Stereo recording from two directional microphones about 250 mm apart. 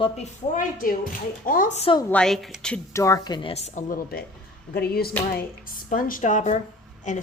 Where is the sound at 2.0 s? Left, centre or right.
Centre.